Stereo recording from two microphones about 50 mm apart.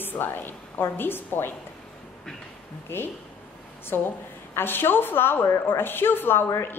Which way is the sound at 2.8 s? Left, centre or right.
Left.